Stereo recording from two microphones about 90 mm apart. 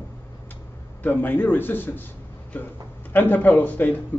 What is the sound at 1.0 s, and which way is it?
A man's voice, 20° left (ahead or behind).